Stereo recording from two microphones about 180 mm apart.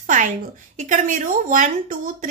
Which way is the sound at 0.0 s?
45° right (ahead or behind).